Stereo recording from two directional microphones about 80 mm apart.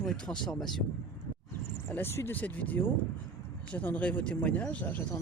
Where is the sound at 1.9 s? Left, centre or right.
Left.